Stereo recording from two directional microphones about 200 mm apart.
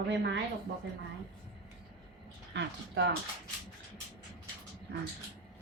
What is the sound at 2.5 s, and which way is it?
Speech, 65° right (ahead or behind).